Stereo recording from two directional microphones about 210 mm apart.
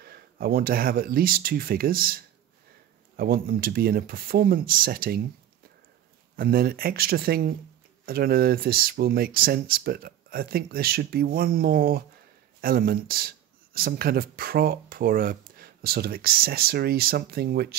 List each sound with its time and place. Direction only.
0.0 s speech: 45° right (ahead or behind)
6.3 s speech: 45° right (ahead or behind)